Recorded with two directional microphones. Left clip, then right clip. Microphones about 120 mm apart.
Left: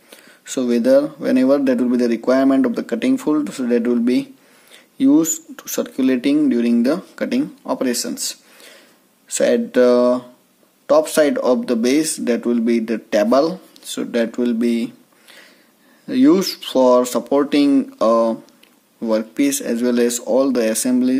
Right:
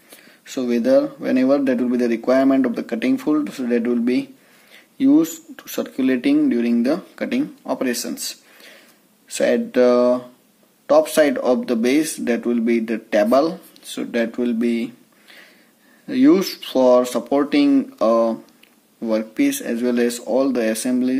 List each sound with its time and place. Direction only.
0.1 s speech: 40° left (ahead or behind)